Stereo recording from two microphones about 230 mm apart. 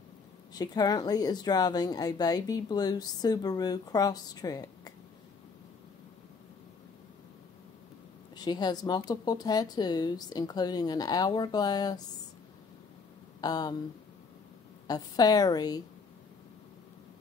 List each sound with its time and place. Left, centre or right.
0.6 s speech: centre
8.4 s speech: centre
13.4 s speech: centre
14.9 s speech: centre